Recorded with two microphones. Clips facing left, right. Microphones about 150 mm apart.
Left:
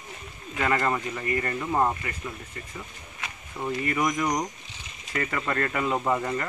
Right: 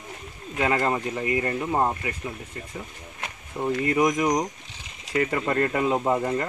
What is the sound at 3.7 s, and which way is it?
Speech, 25° right (ahead or behind).